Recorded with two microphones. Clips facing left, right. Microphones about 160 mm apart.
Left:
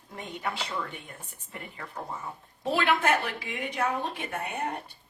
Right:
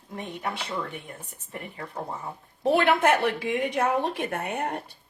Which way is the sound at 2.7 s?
60° right (ahead or behind).